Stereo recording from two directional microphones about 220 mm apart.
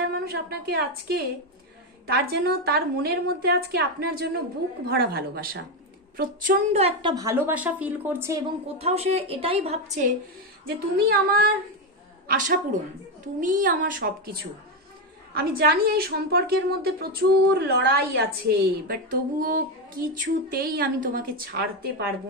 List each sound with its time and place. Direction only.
0.2 s a woman's voice: 45° right (ahead or behind); by 8.5 s 15° right (ahead or behind)
8.7 s a woman's voice: 25° right (ahead or behind)
11.1 s a woman's voice: 45° right (ahead or behind)